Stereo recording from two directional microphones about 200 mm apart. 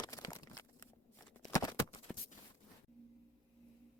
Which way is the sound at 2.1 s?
5° left (ahead or behind).